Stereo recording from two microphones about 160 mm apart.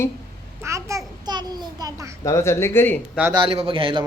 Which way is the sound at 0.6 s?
20° right (ahead or behind).